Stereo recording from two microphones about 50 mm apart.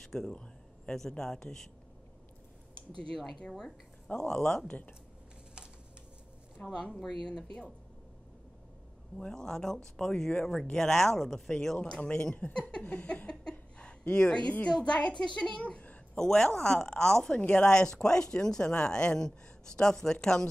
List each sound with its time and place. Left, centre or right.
0.0 s a sound: centre
0.9 s speech: centre
3.2 s speech: centre
4.6 s speech: left
6.6 s speech: centre
9.2 s a child's voice: centre
16.2 s speech: centre